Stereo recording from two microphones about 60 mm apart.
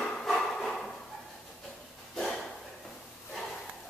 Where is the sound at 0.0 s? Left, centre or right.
Centre.